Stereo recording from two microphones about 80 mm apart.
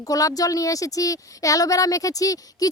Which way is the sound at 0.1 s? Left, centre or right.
Left.